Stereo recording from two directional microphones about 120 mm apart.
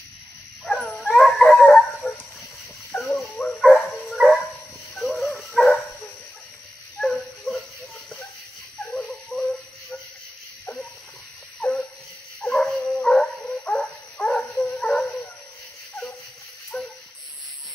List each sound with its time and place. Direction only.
0.7 s dog: centre (ahead or behind)
2.0 s a sound: 15° left (ahead or behind)
3.6 s dog: 5° right (ahead or behind)
5.6 s dog: 5° right (ahead or behind)
7.0 s dog: 5° left (ahead or behind)
8.9 s a sound: 5° left (ahead or behind)
11.6 s dog: 5° left (ahead or behind)
16.7 s dog: 10° left (ahead or behind)